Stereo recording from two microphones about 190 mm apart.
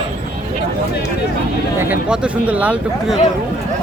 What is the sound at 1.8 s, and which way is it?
Speech, 5° right (ahead or behind).